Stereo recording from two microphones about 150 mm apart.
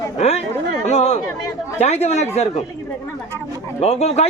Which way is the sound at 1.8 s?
45° left (ahead or behind).